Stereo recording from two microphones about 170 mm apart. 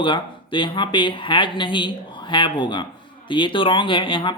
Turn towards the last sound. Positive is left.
turn(degrees=30)  # may be behind; listen again after turning